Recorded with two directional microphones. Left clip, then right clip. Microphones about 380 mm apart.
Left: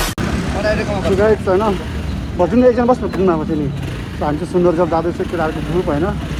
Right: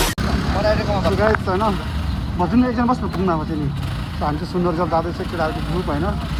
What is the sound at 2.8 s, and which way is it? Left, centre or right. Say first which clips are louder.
Speech: left 6 dB; left.